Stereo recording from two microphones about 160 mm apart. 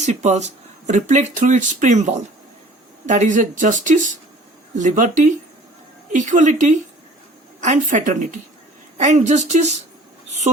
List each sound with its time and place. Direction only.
0.0 s speech: 45° right (ahead or behind)